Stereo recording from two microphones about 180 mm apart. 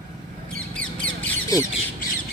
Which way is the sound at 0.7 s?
5° left (ahead or behind).